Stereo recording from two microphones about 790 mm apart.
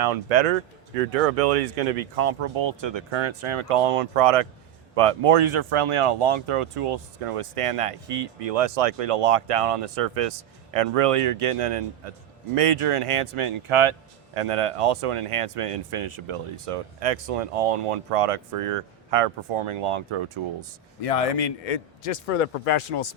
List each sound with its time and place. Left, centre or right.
0.0 s speech: right
21.0 s a man's voice: left